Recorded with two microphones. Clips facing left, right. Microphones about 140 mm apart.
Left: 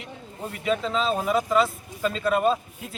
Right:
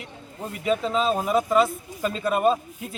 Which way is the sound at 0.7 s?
5° right (ahead or behind).